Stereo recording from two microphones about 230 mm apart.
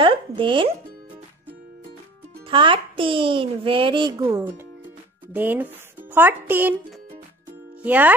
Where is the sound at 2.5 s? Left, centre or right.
Right.